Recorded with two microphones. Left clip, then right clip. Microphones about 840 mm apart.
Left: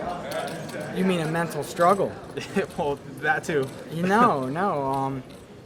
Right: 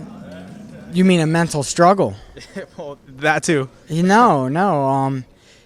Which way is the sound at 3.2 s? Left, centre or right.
Right.